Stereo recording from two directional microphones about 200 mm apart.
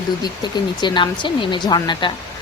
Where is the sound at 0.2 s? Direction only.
20° left (ahead or behind).